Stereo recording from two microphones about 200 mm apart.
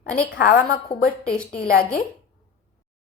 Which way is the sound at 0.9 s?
30° left (ahead or behind).